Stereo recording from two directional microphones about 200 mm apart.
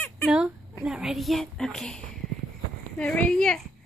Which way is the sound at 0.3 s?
5° right (ahead or behind).